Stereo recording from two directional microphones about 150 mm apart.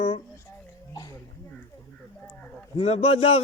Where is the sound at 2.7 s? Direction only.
45° left (ahead or behind).